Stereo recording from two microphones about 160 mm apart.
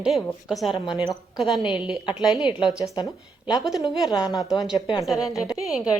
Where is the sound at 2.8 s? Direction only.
25° left (ahead or behind).